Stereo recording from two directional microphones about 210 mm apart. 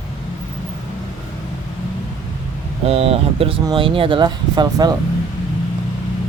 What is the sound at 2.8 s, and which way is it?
Speech, 30° right (ahead or behind).